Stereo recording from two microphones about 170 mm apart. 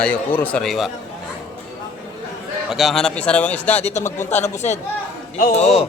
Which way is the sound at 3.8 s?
40° left (ahead or behind).